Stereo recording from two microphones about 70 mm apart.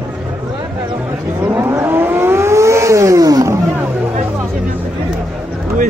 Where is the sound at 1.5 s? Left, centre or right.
Right.